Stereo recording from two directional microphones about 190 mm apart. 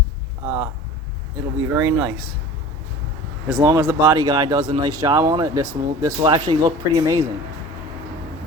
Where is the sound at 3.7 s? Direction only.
15° right (ahead or behind).